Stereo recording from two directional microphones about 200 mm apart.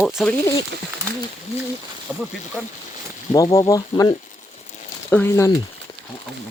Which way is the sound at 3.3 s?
15° left (ahead or behind).